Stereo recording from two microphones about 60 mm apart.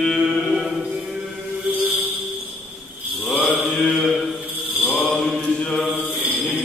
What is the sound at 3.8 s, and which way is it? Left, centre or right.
Mantra, centre.